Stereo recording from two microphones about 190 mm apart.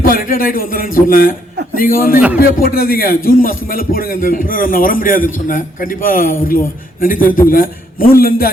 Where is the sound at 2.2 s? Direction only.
10° right (ahead or behind).